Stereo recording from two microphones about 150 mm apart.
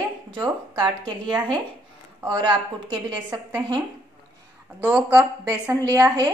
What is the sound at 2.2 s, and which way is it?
Speech, 30° right (ahead or behind).